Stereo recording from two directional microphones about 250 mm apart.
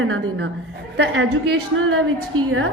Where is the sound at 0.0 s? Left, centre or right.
Right.